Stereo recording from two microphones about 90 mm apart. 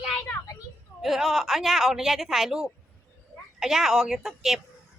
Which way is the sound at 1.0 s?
5° right (ahead or behind).